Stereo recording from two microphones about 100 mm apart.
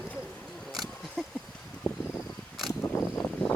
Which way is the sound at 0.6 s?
Centre (ahead or behind).